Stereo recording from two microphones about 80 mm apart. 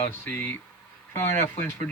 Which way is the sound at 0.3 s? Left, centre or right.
Left.